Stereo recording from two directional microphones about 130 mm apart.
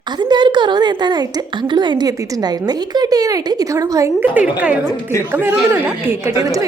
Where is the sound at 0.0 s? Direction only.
35° right (ahead or behind).